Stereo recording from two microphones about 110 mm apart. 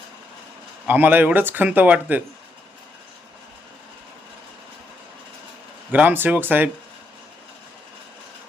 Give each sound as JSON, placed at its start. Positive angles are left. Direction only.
{"t": 0.9, "sound": "speech", "side_deg": -15}
{"t": 5.9, "sound": "speech", "side_deg": -15}